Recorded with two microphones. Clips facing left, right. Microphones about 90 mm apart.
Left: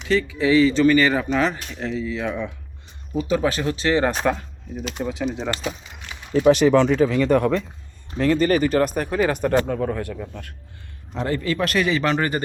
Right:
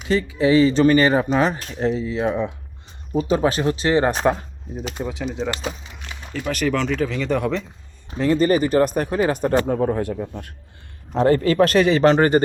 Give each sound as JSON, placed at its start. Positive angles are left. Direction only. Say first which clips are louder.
{"t": 0.1, "sound": "a man's voice", "louder": "right 1 dB", "side_deg": -35}
{"t": 5.2, "sound": "speech", "louder": "even", "side_deg": 5}
{"t": 6.0, "sound": "a sound", "louder": "left 12 dB", "side_deg": 30}
{"t": 6.7, "sound": "speech", "louder": "left 5 dB", "side_deg": 15}
{"t": 7.3, "sound": "speech", "louder": "left 1 dB", "side_deg": 0}
{"t": 8.3, "sound": "speech", "louder": "right 1 dB", "side_deg": -25}
{"t": 11.1, "sound": "a man's voice", "louder": "right 7 dB", "side_deg": -40}